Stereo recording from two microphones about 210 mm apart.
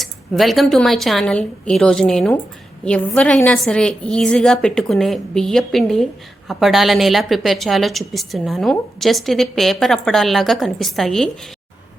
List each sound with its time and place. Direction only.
0.0 s a woman's voice: centre (ahead or behind)